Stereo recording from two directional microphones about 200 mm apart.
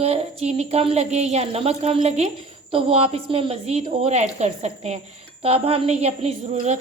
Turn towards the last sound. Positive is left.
turn(degrees=-30)  # may be behind; listen again after turning